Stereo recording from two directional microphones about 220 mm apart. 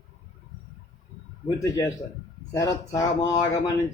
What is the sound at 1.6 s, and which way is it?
Speech, 15° left (ahead or behind).